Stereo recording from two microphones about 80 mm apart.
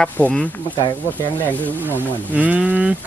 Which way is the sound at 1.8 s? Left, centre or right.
Right.